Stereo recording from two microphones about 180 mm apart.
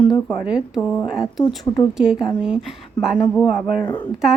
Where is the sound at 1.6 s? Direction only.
20° left (ahead or behind).